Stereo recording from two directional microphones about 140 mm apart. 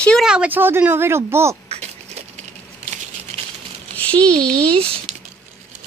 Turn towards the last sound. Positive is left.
turn(degrees=-40)  # may be behind; listen again after turning